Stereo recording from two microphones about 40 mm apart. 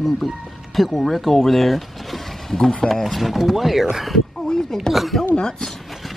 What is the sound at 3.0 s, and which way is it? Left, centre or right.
Speech, centre.